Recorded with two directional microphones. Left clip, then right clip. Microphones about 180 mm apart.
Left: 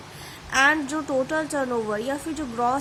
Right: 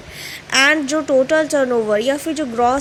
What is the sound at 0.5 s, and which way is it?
A woman's voice, 20° right (ahead or behind).